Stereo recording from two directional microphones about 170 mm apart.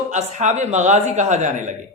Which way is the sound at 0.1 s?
45° right (ahead or behind).